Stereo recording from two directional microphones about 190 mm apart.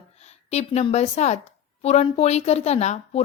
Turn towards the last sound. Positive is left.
turn(degrees=35)  # may be behind; listen again after turning